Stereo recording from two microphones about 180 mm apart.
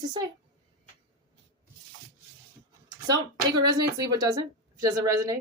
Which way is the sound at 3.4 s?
25° right (ahead or behind).